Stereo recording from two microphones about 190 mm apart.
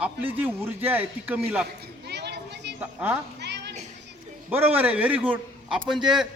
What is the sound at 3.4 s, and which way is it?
Children playing, 65° right (ahead or behind).